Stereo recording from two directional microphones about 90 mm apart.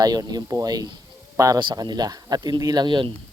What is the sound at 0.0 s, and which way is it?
Speech, 45° right (ahead or behind).